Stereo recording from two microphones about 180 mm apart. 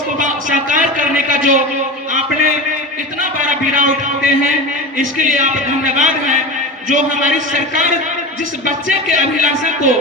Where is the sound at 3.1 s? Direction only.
45° right (ahead or behind).